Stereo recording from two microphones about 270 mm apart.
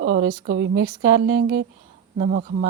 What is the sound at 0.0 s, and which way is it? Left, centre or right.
Speech, right.